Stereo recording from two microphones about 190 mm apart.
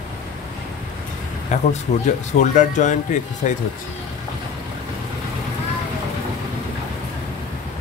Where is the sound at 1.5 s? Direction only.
40° left (ahead or behind).